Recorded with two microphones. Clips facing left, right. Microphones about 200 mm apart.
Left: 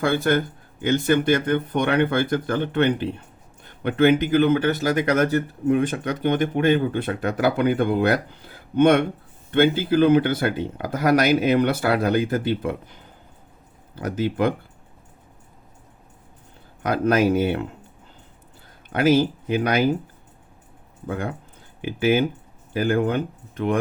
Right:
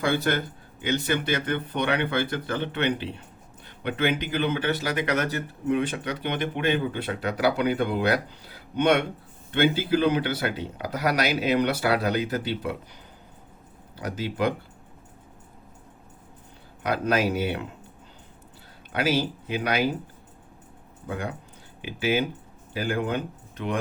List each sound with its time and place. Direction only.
0.0 s speech: 50° left (ahead or behind)
16.8 s speech: 50° left (ahead or behind)
18.9 s speech: 50° left (ahead or behind)
21.1 s speech: 55° left (ahead or behind)